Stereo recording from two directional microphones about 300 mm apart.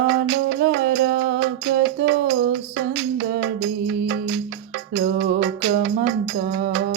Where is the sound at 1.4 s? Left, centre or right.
Right.